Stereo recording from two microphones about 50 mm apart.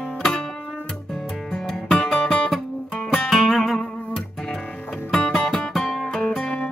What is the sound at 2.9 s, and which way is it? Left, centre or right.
Music, centre.